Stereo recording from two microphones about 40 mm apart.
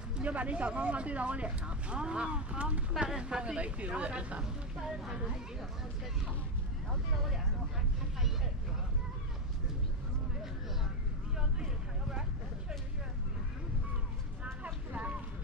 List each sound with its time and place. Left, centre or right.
0.2 s speech: right
11.3 s vehicle: centre
14.4 s vehicle: right